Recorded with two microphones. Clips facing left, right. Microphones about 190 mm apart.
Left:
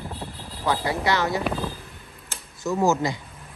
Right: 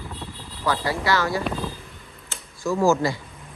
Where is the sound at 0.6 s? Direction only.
20° left (ahead or behind).